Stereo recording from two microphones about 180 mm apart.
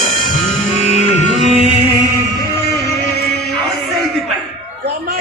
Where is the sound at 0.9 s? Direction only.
40° left (ahead or behind).